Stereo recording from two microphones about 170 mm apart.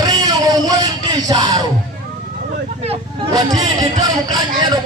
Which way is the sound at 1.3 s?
25° right (ahead or behind).